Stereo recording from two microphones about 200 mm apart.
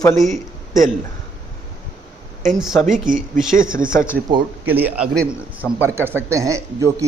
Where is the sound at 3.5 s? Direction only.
45° right (ahead or behind).